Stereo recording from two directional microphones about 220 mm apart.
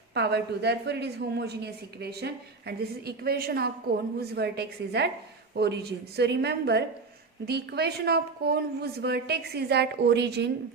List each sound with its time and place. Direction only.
0.1 s a woman's voice: 50° right (ahead or behind)